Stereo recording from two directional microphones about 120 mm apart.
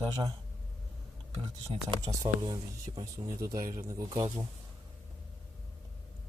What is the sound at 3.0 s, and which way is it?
Speech, 25° right (ahead or behind).